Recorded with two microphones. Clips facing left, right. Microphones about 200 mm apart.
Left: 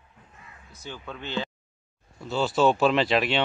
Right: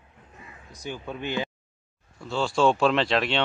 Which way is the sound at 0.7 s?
15° right (ahead or behind).